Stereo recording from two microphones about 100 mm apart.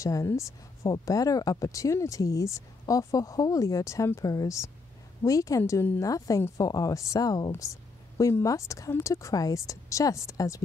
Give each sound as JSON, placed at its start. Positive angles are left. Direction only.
{"t": 0.0, "sound": "speech", "side_deg": 30}